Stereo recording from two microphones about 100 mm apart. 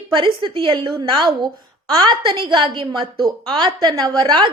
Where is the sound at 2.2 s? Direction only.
55° right (ahead or behind).